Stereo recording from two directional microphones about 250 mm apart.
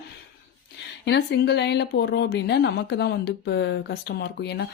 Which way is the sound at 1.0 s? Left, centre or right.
Left.